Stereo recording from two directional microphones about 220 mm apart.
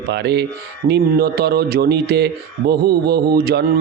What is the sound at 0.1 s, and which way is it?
A man's voice, 50° right (ahead or behind).